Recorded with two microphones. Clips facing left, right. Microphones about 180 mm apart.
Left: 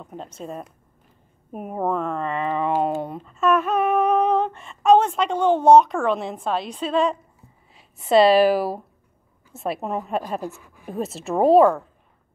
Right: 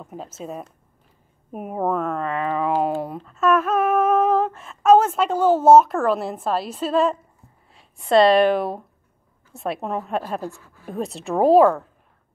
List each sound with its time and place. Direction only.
0.0 s humming: 5° right (ahead or behind)
7.7 s a woman's voice: centre (ahead or behind)
9.5 s humming: centre (ahead or behind)
10.4 s speech: 15° left (ahead or behind)
10.9 s humming: centre (ahead or behind)